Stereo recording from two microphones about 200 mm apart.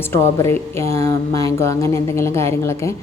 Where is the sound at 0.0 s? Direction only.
10° left (ahead or behind).